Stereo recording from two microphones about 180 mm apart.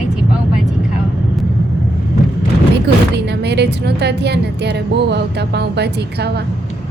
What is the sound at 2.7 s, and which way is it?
A woman's voice, 70° right (ahead or behind).